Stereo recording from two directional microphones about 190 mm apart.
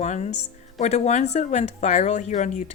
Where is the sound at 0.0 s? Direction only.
35° left (ahead or behind).